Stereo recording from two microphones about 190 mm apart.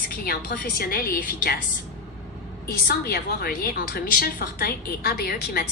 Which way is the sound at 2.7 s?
55° left (ahead or behind).